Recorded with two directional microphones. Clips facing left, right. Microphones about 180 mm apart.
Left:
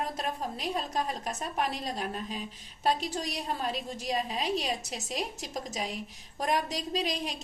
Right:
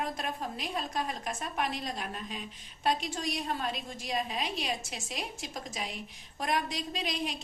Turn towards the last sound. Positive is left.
turn(degrees=40)  # may be behind; listen again after turning